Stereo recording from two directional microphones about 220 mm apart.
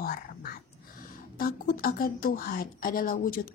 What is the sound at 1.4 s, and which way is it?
Speech, 40° left (ahead or behind).